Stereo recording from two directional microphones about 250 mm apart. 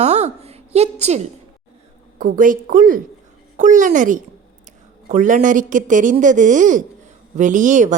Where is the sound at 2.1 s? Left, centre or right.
Right.